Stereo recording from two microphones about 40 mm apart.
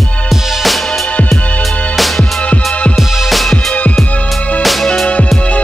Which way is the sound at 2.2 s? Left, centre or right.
Left.